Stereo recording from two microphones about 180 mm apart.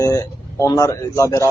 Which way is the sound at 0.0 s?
20° left (ahead or behind).